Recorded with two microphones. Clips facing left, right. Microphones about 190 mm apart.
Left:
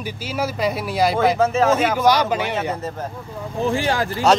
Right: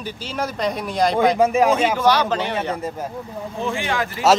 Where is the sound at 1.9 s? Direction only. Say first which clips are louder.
Left 1 dB; 10° left (ahead or behind).